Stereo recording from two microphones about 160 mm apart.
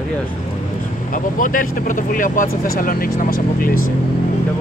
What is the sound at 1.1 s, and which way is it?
Speech, 55° left (ahead or behind).